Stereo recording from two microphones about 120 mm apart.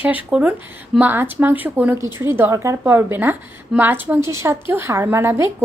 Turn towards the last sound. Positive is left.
turn(degrees=-20)  # may be behind; listen again after turning